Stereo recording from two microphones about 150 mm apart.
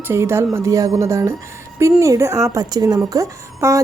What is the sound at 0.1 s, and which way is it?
Speech, 15° right (ahead or behind).